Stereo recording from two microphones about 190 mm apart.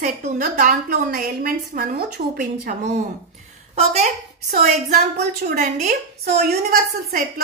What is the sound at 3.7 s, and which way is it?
A woman's voice, 40° right (ahead or behind).